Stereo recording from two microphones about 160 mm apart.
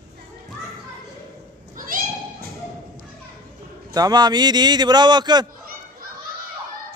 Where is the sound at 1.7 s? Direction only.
60° right (ahead or behind).